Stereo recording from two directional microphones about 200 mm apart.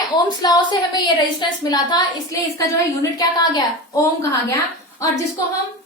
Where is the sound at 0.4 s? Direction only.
20° left (ahead or behind).